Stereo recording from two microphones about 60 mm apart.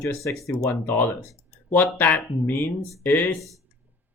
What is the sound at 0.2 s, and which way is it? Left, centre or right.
Speech, left.